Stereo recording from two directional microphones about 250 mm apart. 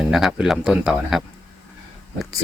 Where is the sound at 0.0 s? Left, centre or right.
Centre.